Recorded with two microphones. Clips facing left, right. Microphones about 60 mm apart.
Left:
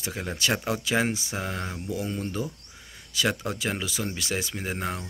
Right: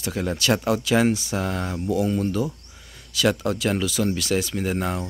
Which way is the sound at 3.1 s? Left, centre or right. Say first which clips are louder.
Right 5 dB; left.